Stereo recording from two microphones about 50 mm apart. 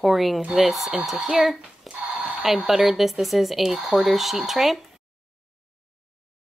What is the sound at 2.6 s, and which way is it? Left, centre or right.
Speech, centre.